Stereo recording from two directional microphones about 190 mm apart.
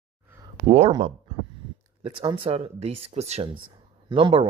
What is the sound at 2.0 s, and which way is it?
Speech, 25° right (ahead or behind).